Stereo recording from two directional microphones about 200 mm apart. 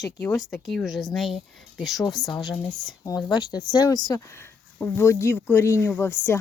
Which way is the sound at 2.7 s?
20° left (ahead or behind).